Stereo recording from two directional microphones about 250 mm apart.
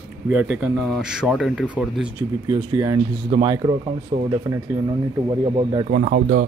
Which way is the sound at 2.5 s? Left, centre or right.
Centre.